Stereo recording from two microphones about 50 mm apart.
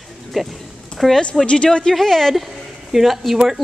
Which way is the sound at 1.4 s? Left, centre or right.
Centre.